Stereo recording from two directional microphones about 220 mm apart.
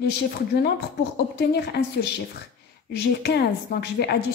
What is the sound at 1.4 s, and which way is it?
Speech, 50° left (ahead or behind).